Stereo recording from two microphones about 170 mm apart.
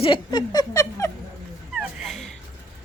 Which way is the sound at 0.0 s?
25° left (ahead or behind).